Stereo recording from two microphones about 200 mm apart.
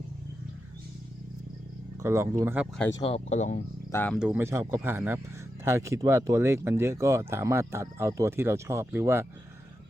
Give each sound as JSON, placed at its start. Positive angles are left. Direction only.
{"t": 2.0, "sound": "speech", "side_deg": -10}
{"t": 3.0, "sound": "speech", "side_deg": 30}
{"t": 3.9, "sound": "speech", "side_deg": 10}
{"t": 4.2, "sound": "speech", "side_deg": -10}